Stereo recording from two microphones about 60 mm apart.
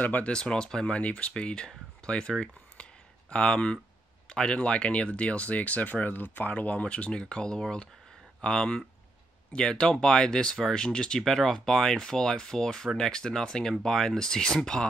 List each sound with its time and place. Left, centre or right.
0.0 s speech: left
0.3 s speech: centre